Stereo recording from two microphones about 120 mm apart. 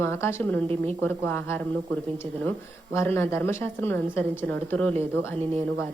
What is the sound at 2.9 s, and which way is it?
A woman's voice, 20° left (ahead or behind).